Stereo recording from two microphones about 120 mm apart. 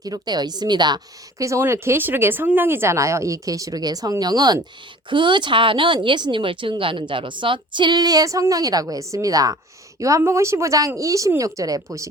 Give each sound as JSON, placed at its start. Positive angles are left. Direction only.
{"t": 0.0, "sound": "a woman's voice", "side_deg": -35}